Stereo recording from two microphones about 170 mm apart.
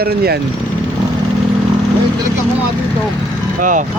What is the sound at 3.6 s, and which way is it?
Speech, 50° right (ahead or behind).